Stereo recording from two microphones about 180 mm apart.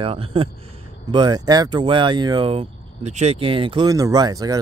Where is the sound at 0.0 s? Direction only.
30° right (ahead or behind).